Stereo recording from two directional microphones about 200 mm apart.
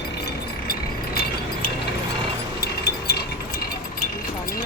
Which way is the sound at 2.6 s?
50° left (ahead or behind).